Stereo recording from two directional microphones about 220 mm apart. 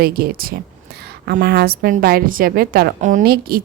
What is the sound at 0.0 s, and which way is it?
A woman's voice, 45° right (ahead or behind).